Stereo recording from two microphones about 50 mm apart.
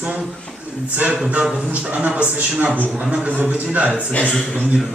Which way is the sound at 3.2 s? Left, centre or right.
Right.